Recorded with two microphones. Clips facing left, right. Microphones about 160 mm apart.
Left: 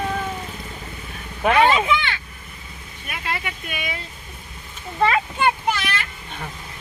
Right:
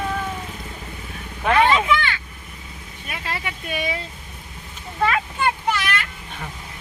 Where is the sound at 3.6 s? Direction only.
30° right (ahead or behind).